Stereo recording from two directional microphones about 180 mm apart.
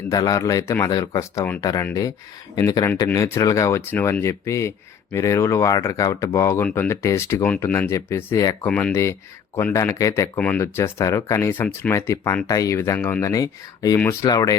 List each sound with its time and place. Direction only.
0.1 s speech: 20° left (ahead or behind)
10.3 s speech: 5° left (ahead or behind)